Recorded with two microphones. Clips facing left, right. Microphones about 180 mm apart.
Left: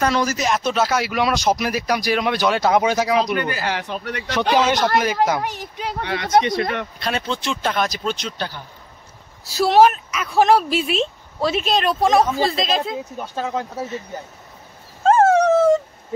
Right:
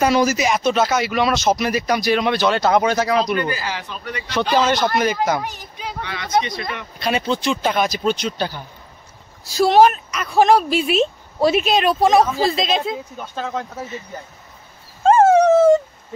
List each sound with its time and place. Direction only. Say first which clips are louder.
0.0 s speech: right 3 dB; 10° right (ahead or behind); by 3.4 s 10° left (ahead or behind)
3.5 s speech: left 3 dB; 65° left (ahead or behind)
4.6 s speech: right 1 dB; 10° left (ahead or behind)
5.4 s speech: left 3 dB; 65° left (ahead or behind)
7.0 s a woman's voice: right 4 dB; 5° right (ahead or behind)
9.4 s a woman's voice: right 1 dB; 5° left (ahead or behind)
15.0 s dog: right 2 dB; centre (ahead or behind)